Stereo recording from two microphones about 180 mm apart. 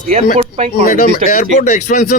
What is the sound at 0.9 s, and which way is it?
Speech, 45° left (ahead or behind).